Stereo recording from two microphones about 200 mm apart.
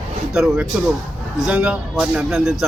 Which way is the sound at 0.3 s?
5° right (ahead or behind).